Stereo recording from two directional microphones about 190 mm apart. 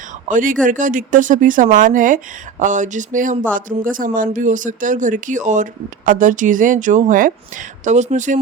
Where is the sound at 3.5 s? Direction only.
45° right (ahead or behind).